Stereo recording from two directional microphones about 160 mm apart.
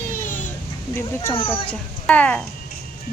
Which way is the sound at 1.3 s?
35° left (ahead or behind).